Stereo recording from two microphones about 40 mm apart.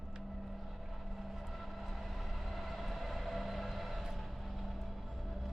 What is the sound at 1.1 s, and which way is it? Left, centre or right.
Vehicle, centre.